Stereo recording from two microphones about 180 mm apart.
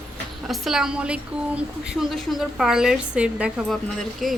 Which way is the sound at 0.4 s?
Centre (ahead or behind).